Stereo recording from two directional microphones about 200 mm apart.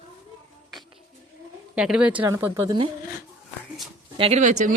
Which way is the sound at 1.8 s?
5° right (ahead or behind).